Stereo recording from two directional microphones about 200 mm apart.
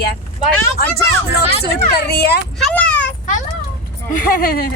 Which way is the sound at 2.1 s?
50° left (ahead or behind).